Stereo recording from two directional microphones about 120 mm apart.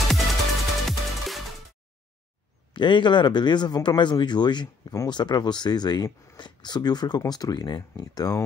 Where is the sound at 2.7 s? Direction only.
40° left (ahead or behind).